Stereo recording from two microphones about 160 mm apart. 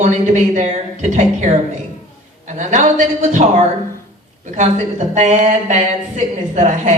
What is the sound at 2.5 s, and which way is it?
Speech, 50° right (ahead or behind).